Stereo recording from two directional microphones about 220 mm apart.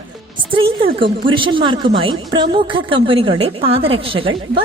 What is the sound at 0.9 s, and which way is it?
A woman's voice, 25° right (ahead or behind).